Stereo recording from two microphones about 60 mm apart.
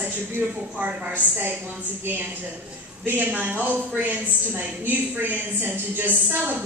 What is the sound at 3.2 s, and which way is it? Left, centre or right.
A woman's voice, right.